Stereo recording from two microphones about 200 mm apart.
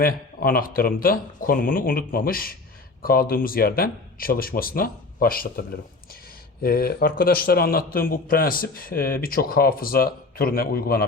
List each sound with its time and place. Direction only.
0.0 s a man's voice: 45° left (ahead or behind)